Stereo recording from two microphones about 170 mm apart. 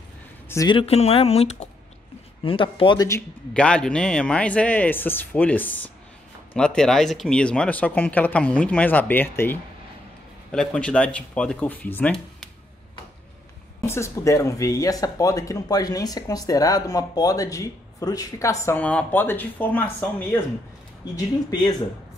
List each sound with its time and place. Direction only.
0.5 s speech: 20° left (ahead or behind)
0.7 s speech: 35° left (ahead or behind)
3.5 s speech: 5° left (ahead or behind)
13.8 s speech: 15° left (ahead or behind)
21.5 s speech: 25° left (ahead or behind)